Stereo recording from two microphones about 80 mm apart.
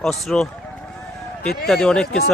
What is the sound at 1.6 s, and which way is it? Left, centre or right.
Speech, centre.